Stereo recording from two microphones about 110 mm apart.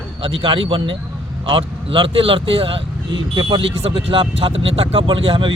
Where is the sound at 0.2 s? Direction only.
55° right (ahead or behind).